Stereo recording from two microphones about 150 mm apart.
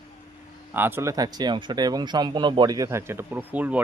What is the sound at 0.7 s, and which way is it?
Speech, 15° right (ahead or behind).